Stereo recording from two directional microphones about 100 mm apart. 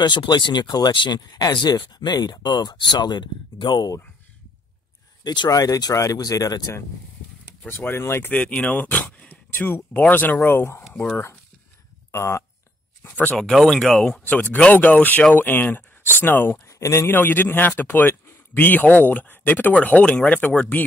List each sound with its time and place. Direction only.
0.0 s speech: 50° left (ahead or behind)
5.2 s speech: 50° left (ahead or behind)
5.5 s speech: 35° left (ahead or behind)
7.6 s speech: 20° left (ahead or behind)
8.3 s speech: 15° left (ahead or behind)
12.1 s speech: 30° left (ahead or behind)
13.4 s speech: 5° left (ahead or behind)
14.2 s speech: 15° left (ahead or behind)
16.6 s speech: 30° left (ahead or behind); by 20.8 s 10° left (ahead or behind)